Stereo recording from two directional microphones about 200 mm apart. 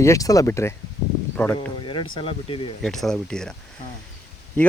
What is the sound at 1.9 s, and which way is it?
Speech, 25° left (ahead or behind).